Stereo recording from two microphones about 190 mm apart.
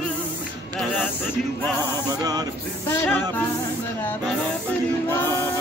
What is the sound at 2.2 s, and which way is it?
Mantra, 20° right (ahead or behind).